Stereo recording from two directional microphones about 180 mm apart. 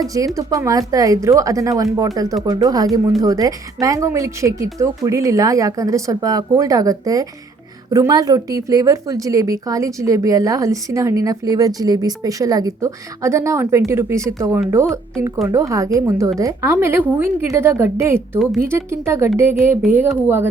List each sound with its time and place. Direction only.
0.0 s a woman's voice: 20° right (ahead or behind)